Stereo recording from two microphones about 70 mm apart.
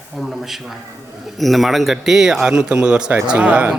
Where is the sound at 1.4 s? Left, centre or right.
Centre.